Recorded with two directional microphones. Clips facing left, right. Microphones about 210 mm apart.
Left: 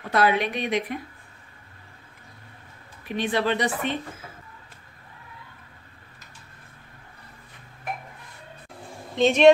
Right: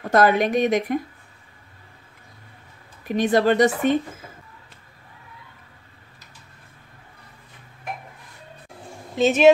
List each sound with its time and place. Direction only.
0.1 s speech: 45° right (ahead or behind)
3.1 s speech: 45° right (ahead or behind)
9.1 s speech: 5° right (ahead or behind)